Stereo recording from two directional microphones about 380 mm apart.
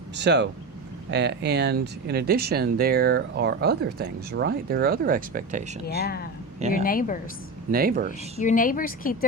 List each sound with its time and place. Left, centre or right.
0.2 s speech: right
5.8 s speech: left
7.7 s speech: right
8.4 s speech: centre